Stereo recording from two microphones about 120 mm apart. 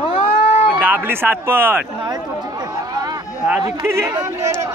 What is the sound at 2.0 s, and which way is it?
Chatter, 35° right (ahead or behind).